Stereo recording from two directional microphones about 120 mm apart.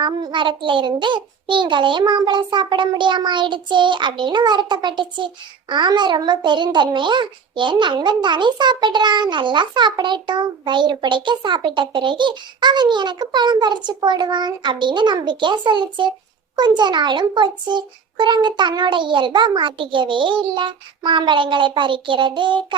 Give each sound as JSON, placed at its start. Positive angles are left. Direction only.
{"t": 0.0, "sound": "a child's voice", "side_deg": -40}